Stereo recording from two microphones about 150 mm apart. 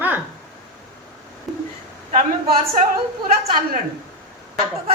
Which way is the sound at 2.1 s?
65° right (ahead or behind).